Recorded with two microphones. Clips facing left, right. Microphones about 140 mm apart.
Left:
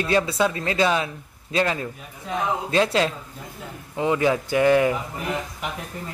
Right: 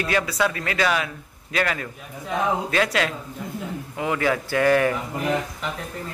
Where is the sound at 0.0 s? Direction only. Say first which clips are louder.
Left 2 dB; 25° left (ahead or behind).